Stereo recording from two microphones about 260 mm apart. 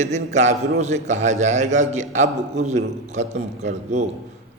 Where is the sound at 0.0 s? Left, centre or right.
Right.